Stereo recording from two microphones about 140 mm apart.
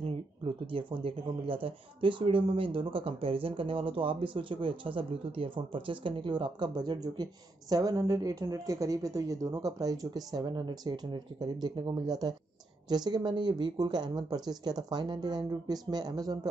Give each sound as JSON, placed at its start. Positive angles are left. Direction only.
{"t": 0.7, "sound": "speech", "side_deg": -40}